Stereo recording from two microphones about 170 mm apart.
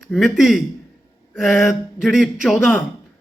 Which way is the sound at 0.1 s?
Centre (ahead or behind).